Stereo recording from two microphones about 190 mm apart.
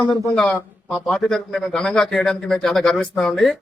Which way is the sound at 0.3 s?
Centre (ahead or behind).